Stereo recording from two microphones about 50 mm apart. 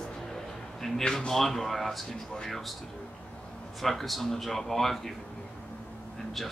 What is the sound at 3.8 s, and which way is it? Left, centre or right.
Speech, centre.